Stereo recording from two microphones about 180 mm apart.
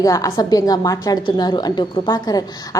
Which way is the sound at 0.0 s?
20° left (ahead or behind).